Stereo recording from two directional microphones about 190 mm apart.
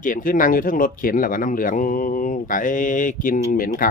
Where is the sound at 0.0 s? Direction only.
45° left (ahead or behind).